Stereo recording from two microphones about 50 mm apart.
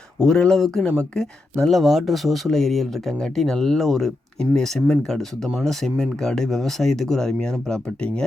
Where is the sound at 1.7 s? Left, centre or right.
Centre.